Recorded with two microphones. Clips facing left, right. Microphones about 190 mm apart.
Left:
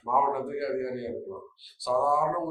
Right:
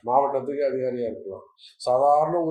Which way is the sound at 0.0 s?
50° right (ahead or behind).